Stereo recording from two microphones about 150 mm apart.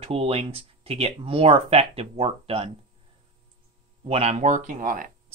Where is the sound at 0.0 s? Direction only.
40° right (ahead or behind).